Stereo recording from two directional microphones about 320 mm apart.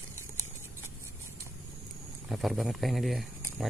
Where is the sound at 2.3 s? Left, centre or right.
Centre.